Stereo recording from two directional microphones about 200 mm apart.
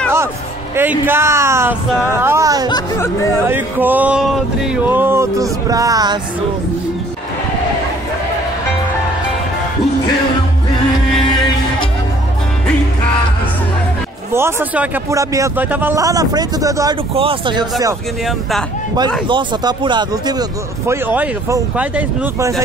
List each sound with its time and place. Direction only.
0.7 s speech: 10° right (ahead or behind)
2.7 s speech: 15° left (ahead or behind)
3.4 s speech: 10° right (ahead or behind)
14.3 s speech: 10° right (ahead or behind)
17.1 s speech: 25° right (ahead or behind)
19.2 s speech: 25° right (ahead or behind)